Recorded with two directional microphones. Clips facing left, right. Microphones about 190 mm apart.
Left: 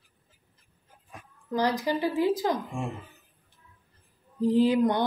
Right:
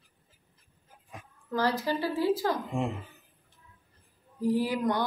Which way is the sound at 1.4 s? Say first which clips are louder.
Left 2 dB; 15° left (ahead or behind).